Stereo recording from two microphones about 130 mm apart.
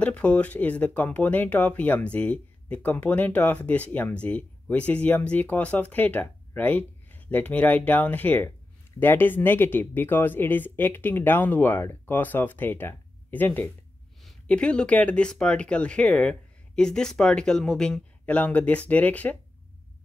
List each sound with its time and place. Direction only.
0.0 s speech: 10° left (ahead or behind)